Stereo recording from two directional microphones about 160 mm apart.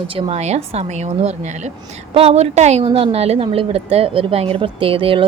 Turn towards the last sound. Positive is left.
turn(degrees=-35)  # may be behind; listen again after turning